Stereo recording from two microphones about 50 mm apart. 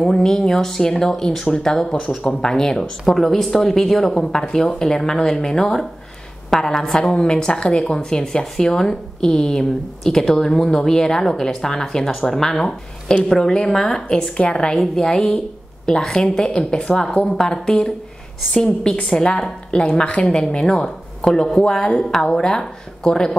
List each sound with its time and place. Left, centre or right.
0.0 s a woman's voice: centre